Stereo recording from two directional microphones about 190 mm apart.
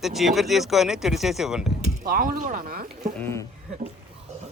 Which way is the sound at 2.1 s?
50° right (ahead or behind).